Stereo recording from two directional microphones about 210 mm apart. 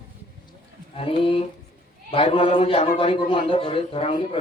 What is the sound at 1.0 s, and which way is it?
Speech, 25° left (ahead or behind).